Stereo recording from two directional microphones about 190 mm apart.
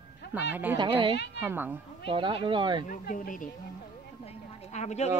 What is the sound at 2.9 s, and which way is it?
Speech, 45° left (ahead or behind).